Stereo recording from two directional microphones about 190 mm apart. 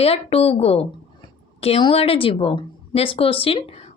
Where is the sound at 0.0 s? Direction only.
30° left (ahead or behind).